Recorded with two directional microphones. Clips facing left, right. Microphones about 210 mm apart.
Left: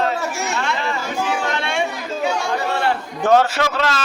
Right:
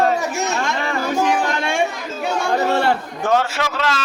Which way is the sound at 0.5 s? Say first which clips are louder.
Right 1 dB; 50° right (ahead or behind).